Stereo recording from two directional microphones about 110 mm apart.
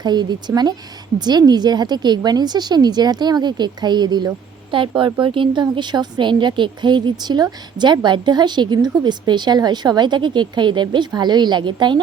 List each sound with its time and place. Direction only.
0.0 s a woman's voice: 40° right (ahead or behind)